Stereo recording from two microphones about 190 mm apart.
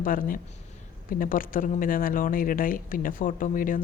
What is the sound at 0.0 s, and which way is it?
Speech, 45° left (ahead or behind).